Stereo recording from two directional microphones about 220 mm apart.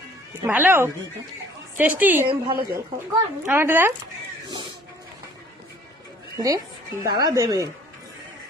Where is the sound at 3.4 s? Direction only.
10° right (ahead or behind).